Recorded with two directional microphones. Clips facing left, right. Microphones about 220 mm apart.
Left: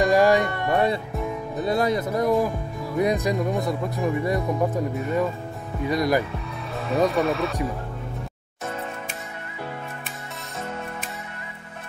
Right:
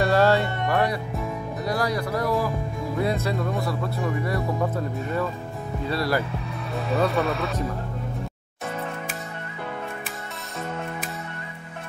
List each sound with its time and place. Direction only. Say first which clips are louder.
0.0 s music: left 2 dB; 15° left (ahead or behind)
1.6 s speech: left 4 dB; 25° left (ahead or behind)
6.7 s music: even; centre (ahead or behind)
7.1 s speech: left 2 dB; centre (ahead or behind)